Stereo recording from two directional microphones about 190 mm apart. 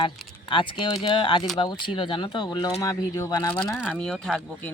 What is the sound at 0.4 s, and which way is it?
Speech, 25° left (ahead or behind).